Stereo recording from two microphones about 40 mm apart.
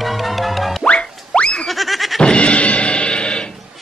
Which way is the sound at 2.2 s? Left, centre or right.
Left.